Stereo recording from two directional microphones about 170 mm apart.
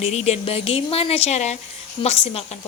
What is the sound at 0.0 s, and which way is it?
A woman's voice, 40° left (ahead or behind).